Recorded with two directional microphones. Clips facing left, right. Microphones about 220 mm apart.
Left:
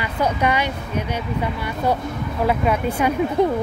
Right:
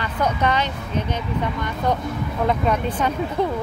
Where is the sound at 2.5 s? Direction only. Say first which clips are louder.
Left 2 dB; 10° left (ahead or behind).